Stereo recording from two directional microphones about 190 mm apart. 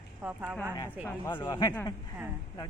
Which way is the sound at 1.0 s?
15° left (ahead or behind).